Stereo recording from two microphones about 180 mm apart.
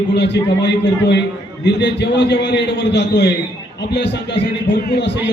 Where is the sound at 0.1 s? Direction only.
70° left (ahead or behind).